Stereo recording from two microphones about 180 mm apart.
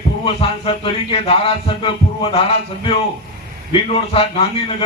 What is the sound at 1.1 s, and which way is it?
Speech, 30° left (ahead or behind).